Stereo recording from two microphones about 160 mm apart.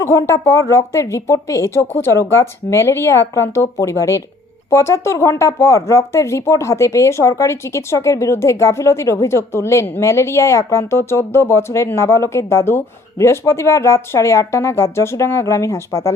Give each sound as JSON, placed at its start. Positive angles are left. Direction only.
{"t": 0.0, "sound": "speech", "side_deg": 20}